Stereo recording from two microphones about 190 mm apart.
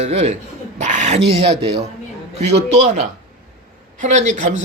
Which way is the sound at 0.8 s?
40° right (ahead or behind).